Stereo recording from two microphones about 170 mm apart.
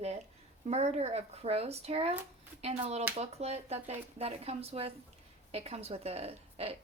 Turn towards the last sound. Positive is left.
turn(degrees=-35)  # may be behind; listen again after turning